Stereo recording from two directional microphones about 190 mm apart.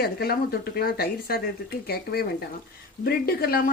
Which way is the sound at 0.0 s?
55° left (ahead or behind).